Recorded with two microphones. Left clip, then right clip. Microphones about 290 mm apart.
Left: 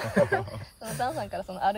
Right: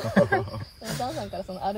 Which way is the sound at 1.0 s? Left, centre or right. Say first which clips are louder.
Left 2 dB; left.